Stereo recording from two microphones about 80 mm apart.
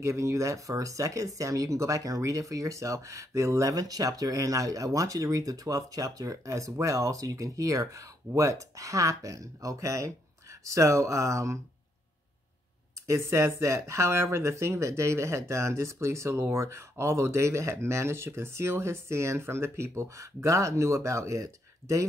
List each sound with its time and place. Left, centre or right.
0.0 s speech: right
13.0 s speech: right